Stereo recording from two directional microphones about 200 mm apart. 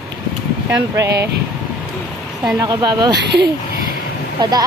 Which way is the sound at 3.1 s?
55° right (ahead or behind).